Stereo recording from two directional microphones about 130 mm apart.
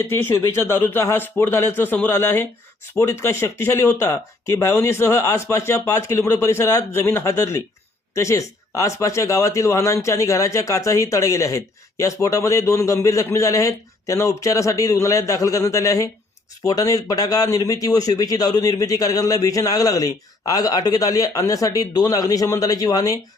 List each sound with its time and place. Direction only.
0.0 s speech: 20° left (ahead or behind)